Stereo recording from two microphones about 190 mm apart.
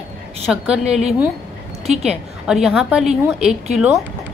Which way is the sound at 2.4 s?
Centre (ahead or behind).